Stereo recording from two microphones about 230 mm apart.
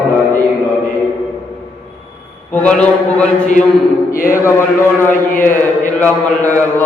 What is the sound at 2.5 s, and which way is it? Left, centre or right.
Speech, centre.